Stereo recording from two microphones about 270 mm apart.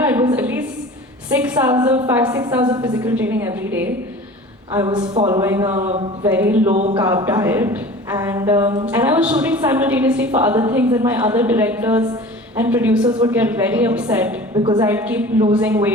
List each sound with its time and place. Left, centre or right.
0.0 s a sound: centre
1.4 s a woman's voice: centre
6.7 s a sound: right
7.0 s a woman's voice: centre
13.1 s a woman's voice: centre
13.3 s a woman's voice: centre
14.5 s a woman's voice: centre